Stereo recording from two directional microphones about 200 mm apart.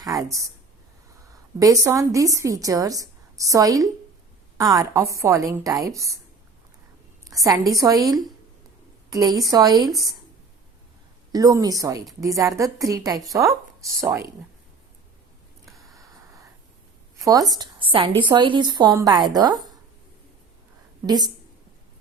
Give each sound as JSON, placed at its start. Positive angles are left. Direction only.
{"t": 0.0, "sound": "a woman's voice", "side_deg": -15}
{"t": 1.5, "sound": "a woman's voice", "side_deg": -15}
{"t": 7.3, "sound": "a woman's voice", "side_deg": -15}
{"t": 11.3, "sound": "a woman's voice", "side_deg": -15}
{"t": 17.2, "sound": "a woman's voice", "side_deg": -15}